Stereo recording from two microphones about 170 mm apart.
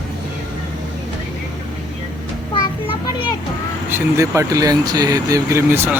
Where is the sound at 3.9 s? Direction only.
15° right (ahead or behind).